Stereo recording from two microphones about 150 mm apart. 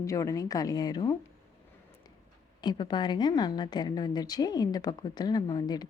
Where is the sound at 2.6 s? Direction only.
30° left (ahead or behind).